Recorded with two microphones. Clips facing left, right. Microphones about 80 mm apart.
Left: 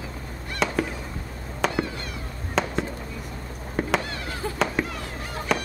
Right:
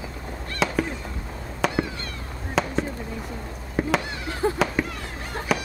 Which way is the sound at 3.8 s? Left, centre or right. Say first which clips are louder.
Right 2 dB; centre.